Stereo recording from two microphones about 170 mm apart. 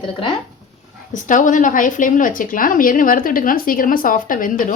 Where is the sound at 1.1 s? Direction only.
50° left (ahead or behind).